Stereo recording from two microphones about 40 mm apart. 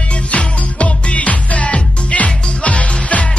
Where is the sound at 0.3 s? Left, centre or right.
Left.